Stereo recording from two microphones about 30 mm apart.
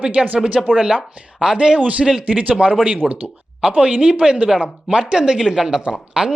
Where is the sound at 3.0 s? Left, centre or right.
Centre.